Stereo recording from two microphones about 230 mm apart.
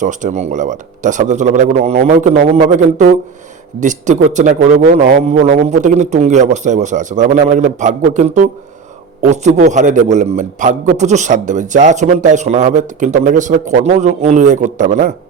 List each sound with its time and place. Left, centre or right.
0.0 s a man's voice: right